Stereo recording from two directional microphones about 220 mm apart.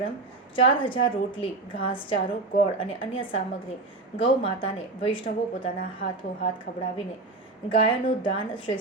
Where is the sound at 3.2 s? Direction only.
25° left (ahead or behind).